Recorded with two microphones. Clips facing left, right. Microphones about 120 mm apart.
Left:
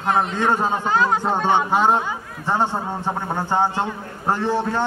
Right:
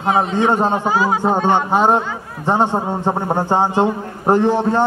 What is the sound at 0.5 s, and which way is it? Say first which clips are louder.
Speech: right 4 dB; 20° right (ahead or behind).